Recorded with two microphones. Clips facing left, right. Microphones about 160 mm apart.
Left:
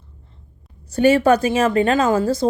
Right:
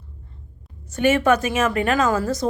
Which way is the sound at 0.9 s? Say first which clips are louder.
Left 4 dB; 35° left (ahead or behind).